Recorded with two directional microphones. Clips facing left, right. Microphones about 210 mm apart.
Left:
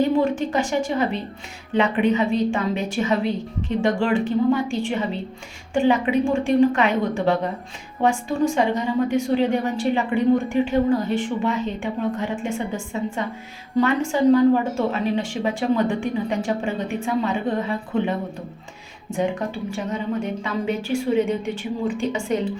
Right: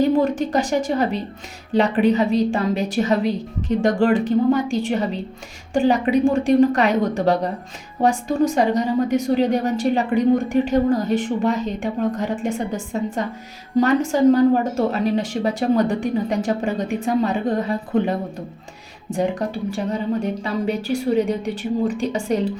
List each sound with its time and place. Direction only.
0.0 s a woman's voice: 40° right (ahead or behind)